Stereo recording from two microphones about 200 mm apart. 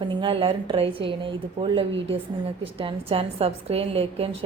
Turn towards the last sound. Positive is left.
turn(degrees=-30)  # may be behind; listen again after turning